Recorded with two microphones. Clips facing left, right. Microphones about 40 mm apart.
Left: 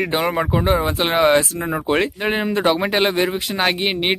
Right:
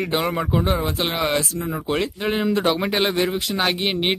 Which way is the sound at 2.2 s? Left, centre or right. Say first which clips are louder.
Left 2 dB; centre.